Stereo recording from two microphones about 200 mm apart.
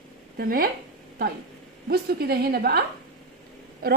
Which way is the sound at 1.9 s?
50° right (ahead or behind).